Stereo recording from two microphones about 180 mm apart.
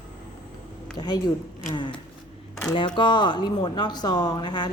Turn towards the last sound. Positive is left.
turn(degrees=25)  # may be behind; listen again after turning